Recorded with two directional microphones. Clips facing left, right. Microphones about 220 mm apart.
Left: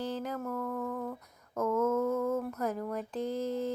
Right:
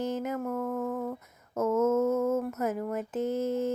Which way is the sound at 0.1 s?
10° right (ahead or behind).